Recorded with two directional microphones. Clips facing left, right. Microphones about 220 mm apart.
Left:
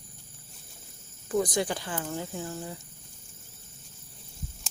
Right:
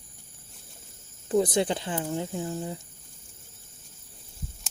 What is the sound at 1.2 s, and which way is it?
Speech, 25° right (ahead or behind).